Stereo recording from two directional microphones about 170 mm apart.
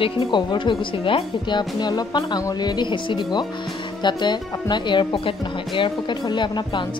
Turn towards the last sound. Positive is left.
turn(degrees=25)  # may be behind; listen again after turning